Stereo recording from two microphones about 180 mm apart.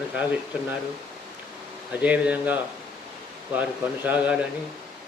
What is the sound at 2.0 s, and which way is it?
A man's voice, 5° right (ahead or behind).